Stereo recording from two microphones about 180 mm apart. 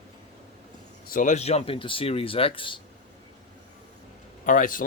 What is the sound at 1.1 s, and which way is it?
Speech, 45° left (ahead or behind).